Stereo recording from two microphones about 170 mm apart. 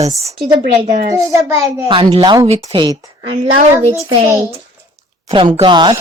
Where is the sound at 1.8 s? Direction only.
30° right (ahead or behind).